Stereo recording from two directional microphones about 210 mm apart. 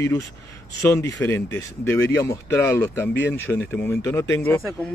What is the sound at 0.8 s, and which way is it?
Speech, 15° left (ahead or behind).